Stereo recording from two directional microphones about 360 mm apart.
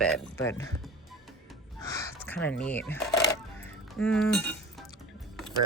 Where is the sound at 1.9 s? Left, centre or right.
Centre.